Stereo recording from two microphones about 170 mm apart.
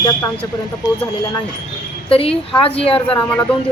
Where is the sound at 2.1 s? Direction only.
35° left (ahead or behind).